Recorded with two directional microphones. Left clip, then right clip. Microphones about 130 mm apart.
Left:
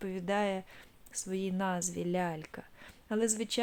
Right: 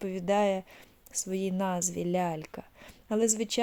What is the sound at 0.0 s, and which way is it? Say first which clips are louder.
A woman's voice: right 6 dB; 25° right (ahead or behind).